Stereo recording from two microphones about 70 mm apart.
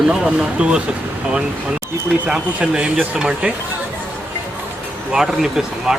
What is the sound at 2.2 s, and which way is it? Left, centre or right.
Speech, centre.